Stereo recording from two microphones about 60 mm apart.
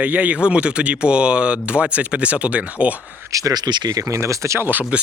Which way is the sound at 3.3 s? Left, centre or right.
Right.